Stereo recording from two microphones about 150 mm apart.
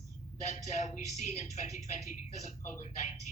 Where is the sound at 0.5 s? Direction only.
50° left (ahead or behind).